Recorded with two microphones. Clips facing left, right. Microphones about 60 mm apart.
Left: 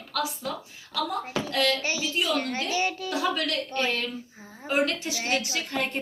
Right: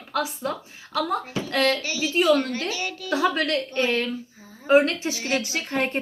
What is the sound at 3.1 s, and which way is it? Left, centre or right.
A woman's voice, right.